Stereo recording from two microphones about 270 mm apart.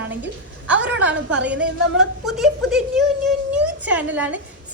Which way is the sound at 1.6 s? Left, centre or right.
Centre.